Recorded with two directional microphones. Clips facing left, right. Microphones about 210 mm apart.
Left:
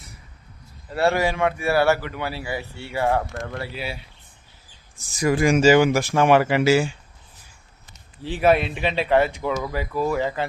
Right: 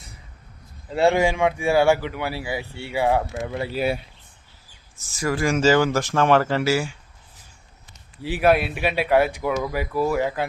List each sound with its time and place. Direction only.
0.9 s a man's voice: 20° right (ahead or behind)
3.8 s speech: 55° right (ahead or behind)
4.9 s speech: 15° left (ahead or behind)
8.2 s a man's voice: 5° right (ahead or behind)